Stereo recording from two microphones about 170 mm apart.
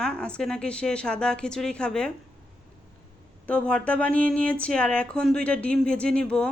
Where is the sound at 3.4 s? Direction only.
5° left (ahead or behind).